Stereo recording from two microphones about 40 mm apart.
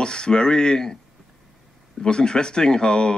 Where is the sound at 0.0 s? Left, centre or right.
Left.